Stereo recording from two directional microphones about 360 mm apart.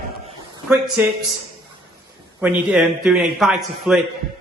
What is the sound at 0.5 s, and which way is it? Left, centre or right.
Speech, centre.